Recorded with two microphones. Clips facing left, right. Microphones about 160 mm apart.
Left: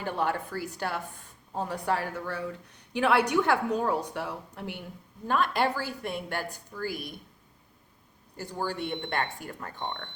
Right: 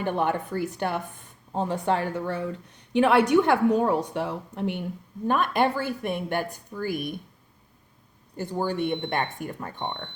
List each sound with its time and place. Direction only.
0.0 s a woman's voice: 20° right (ahead or behind)
8.4 s a woman's voice: 20° right (ahead or behind)